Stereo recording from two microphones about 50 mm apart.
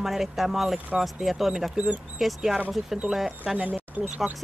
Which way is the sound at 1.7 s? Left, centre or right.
Right.